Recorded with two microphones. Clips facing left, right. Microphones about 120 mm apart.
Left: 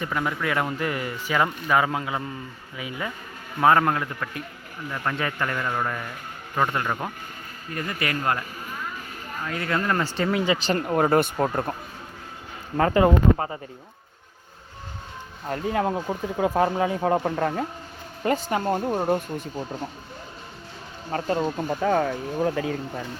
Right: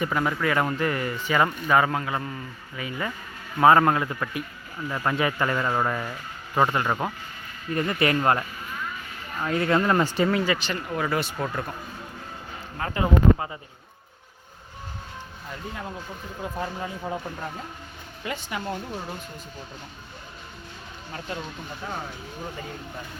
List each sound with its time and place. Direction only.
0.0 s speech: 5° right (ahead or behind)
3.6 s speech: 5° right (ahead or behind)
6.7 s speech: 5° right (ahead or behind)
7.7 s speech: 30° right (ahead or behind)
10.8 s speech: 45° left (ahead or behind)
12.7 s speech: 75° left (ahead or behind)
13.3 s speech: 35° left (ahead or behind)
15.4 s speech: 65° left (ahead or behind)
18.2 s speech: 40° left (ahead or behind)
21.1 s speech: 45° left (ahead or behind)
21.8 s speech: 90° left